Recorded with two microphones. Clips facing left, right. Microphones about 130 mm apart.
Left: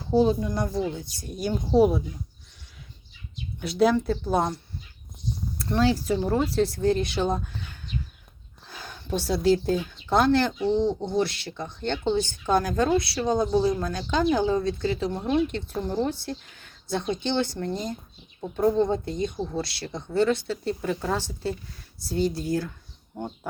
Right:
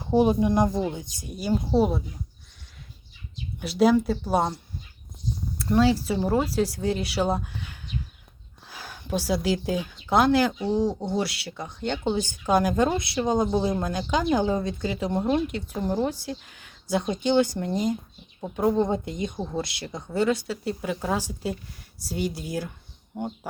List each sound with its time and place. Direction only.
0.0 s speech: 20° right (ahead or behind); by 2.0 s centre (ahead or behind)
3.6 s speech: 5° right (ahead or behind)
8.6 s speech: 10° right (ahead or behind)